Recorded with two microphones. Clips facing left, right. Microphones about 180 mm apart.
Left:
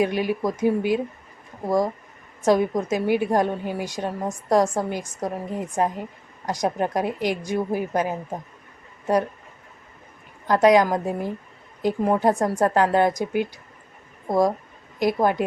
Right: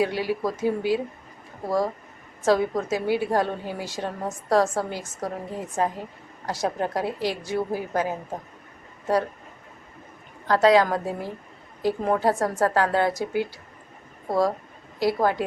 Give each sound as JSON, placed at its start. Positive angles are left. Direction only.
{"t": 0.0, "sound": "a woman's voice", "side_deg": 20}
{"t": 10.4, "sound": "a woman's voice", "side_deg": 15}